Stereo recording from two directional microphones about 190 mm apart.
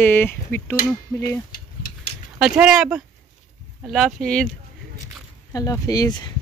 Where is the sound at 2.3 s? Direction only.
5° right (ahead or behind).